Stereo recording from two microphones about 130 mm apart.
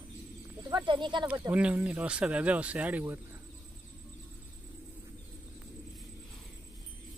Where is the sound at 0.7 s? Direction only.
35° right (ahead or behind).